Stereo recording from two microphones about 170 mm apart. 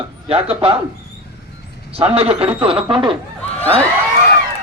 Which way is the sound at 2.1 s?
35° right (ahead or behind).